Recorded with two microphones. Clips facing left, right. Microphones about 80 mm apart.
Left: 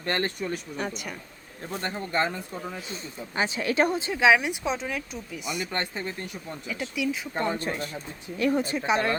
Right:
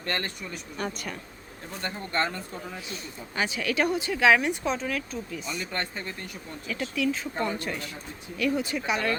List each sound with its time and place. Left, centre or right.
0.0 s speech: left
0.8 s speech: centre
1.8 s speech: left
2.9 s speech: left
7.4 s speech: left